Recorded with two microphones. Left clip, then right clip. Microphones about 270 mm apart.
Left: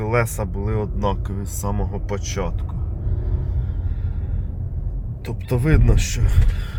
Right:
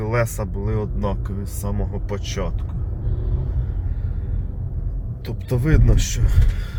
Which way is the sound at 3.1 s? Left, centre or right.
Centre.